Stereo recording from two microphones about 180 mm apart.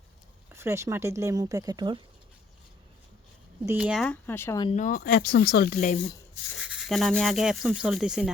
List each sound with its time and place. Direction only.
0.5 s speech: 15° right (ahead or behind)
3.7 s rub: 5° right (ahead or behind); by 4.6 s 15° left (ahead or behind)
4.7 s speech: 45° left (ahead or behind)
6.6 s rub: 5° right (ahead or behind)